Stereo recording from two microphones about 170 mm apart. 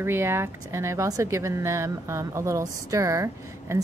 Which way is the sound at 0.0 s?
15° right (ahead or behind).